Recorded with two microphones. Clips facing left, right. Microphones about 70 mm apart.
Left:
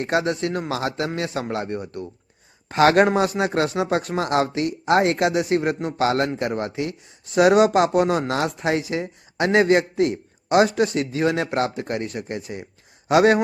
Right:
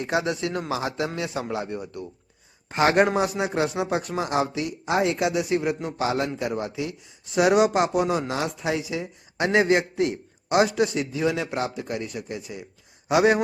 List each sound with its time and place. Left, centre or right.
0.0 s a man's voice: left
0.7 s a man's voice: left
2.6 s speech: left
3.2 s a man's voice: left
5.1 s a man's voice: left
6.0 s a man's voice: left
6.4 s a man's voice: left